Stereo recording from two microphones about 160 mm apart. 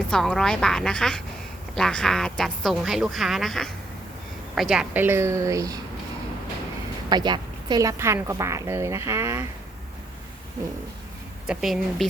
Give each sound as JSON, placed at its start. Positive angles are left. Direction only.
{"t": 0.1, "sound": "a woman's voice", "side_deg": 5}
{"t": 7.1, "sound": "a woman's voice", "side_deg": -25}
{"t": 11.4, "sound": "speech", "side_deg": 0}